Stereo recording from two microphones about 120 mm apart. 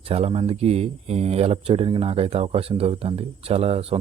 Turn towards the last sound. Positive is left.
turn(degrees=-55)  # may be behind; listen again after turning